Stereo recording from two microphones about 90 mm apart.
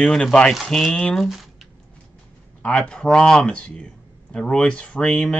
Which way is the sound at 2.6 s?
10° left (ahead or behind).